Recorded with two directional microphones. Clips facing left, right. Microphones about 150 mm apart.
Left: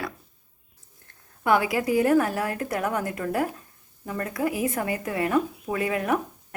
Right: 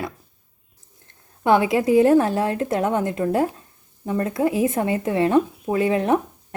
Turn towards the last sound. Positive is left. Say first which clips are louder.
# right 6 dB
turn(degrees=-25)  # may be behind; listen again after turning